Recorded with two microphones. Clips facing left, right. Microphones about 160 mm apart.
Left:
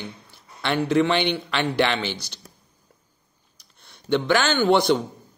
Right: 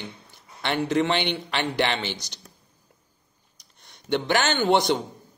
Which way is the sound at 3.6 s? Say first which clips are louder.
Left 1 dB; 15° right (ahead or behind).